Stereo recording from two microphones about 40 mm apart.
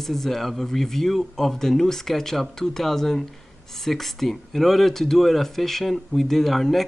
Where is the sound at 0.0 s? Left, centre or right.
Centre.